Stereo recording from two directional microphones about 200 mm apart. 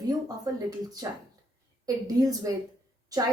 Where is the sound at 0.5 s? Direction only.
15° right (ahead or behind).